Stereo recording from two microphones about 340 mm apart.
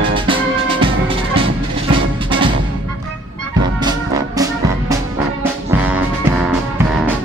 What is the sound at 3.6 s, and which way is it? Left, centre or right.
Music, centre.